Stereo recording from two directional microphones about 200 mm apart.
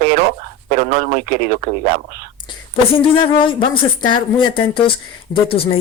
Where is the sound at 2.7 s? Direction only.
25° left (ahead or behind).